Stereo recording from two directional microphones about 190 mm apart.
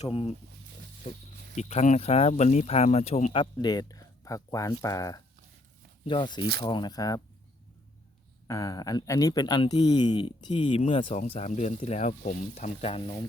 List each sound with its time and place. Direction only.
0.0 s speech: 30° left (ahead or behind)
1.5 s speech: 35° left (ahead or behind)
3.3 s a man's voice: 25° left (ahead or behind)
8.4 s a man's voice: 15° left (ahead or behind)